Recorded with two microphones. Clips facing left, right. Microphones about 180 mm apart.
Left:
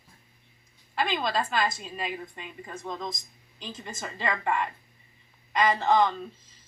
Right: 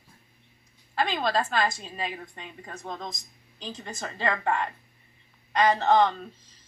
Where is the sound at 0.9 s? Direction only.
40° right (ahead or behind).